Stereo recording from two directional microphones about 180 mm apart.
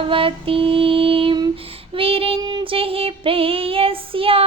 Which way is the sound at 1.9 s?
30° right (ahead or behind).